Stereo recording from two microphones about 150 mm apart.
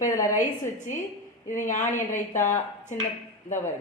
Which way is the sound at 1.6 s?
60° left (ahead or behind).